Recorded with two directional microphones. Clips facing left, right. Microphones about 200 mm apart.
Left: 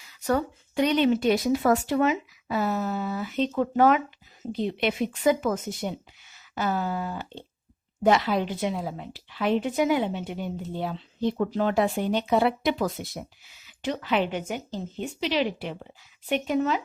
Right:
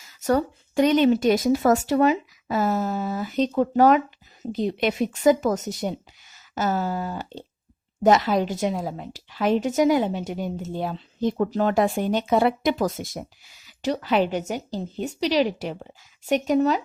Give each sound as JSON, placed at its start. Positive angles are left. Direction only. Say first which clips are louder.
{"t": 0.0, "sound": "a woman's voice", "louder": "right 3 dB", "side_deg": -45}
{"t": 6.3, "sound": "a sound", "louder": "right 3 dB", "side_deg": -40}
{"t": 8.0, "sound": "a woman's voice", "louder": "right 3 dB", "side_deg": -40}